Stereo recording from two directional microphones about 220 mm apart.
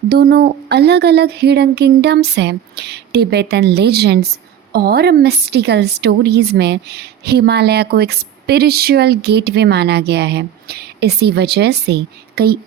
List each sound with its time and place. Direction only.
0.1 s speech: 45° right (ahead or behind)